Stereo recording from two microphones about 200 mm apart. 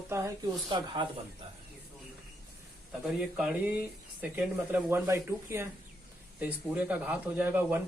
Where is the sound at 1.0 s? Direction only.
25° right (ahead or behind).